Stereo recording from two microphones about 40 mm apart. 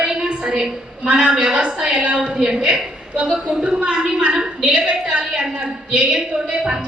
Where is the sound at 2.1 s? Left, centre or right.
Centre.